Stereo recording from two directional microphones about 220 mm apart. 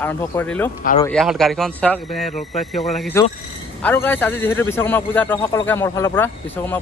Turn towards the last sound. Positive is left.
turn(degrees=10)  # may be behind; listen again after turning